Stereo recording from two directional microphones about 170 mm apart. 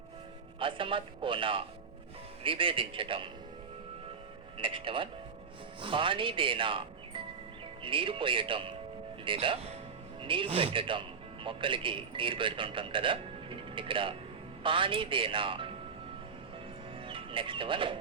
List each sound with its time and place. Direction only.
0.6 s speech: 30° right (ahead or behind)
4.5 s a man's voice: 30° right (ahead or behind)
17.0 s music: 30° right (ahead or behind)